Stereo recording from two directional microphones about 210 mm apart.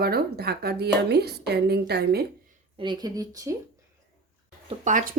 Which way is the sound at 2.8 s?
20° right (ahead or behind).